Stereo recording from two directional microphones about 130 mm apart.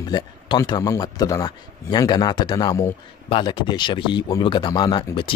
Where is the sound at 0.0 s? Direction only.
30° left (ahead or behind).